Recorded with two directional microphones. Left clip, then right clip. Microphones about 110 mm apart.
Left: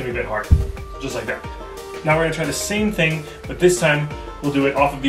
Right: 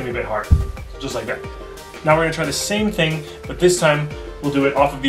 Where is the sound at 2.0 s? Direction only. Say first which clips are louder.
Right 2 dB; 10° right (ahead or behind).